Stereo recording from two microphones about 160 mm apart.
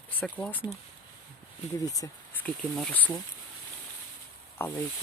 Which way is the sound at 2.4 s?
5° left (ahead or behind).